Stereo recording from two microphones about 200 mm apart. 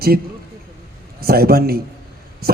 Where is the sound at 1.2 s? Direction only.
50° right (ahead or behind).